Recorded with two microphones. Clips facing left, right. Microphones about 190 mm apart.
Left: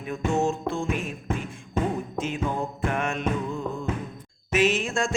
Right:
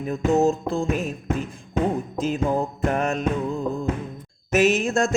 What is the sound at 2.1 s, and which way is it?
Music, 35° right (ahead or behind).